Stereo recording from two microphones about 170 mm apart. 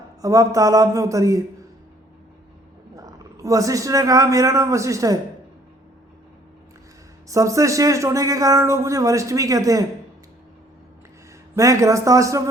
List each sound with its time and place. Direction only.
0.2 s speech: 20° right (ahead or behind)
2.9 s a man's voice: 20° right (ahead or behind)
7.3 s speech: 20° right (ahead or behind)
11.5 s speech: 20° right (ahead or behind)